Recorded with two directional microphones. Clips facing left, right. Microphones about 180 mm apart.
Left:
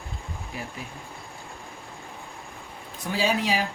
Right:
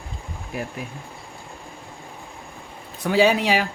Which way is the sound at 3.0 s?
65° right (ahead or behind).